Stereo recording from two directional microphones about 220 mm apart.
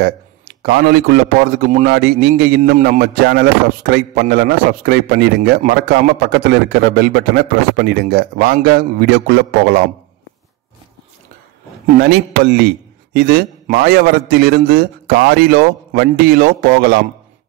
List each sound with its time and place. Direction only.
0.0 s a man's voice: 45° right (ahead or behind)
12.0 s a man's voice: 45° right (ahead or behind)